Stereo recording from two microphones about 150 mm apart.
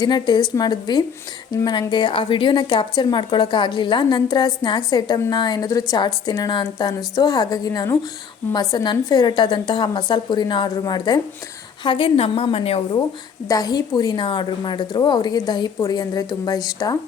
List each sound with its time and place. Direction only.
0.0 s a woman's voice: 30° left (ahead or behind)